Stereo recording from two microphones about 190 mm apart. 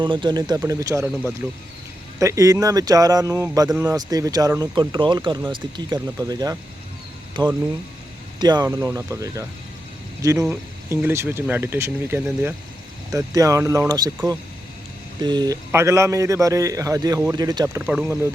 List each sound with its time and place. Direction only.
0.0 s speech: 25° right (ahead or behind)
15.2 s speech: 20° right (ahead or behind)
17.8 s speech: 5° right (ahead or behind)